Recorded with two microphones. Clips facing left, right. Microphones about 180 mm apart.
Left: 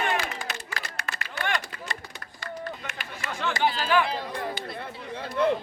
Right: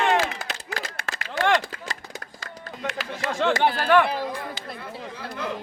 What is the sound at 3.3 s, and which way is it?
Speech, 80° right.